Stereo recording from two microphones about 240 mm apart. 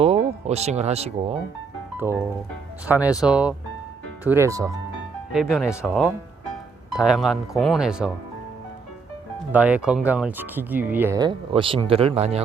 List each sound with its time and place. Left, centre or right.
0.0 s speech: right
2.0 s music: centre
2.8 s speech: centre
5.3 s speech: centre
9.5 s speech: centre; by 12.4 s right